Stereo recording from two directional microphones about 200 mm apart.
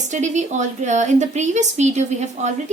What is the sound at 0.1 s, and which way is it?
A woman's voice, 35° right (ahead or behind).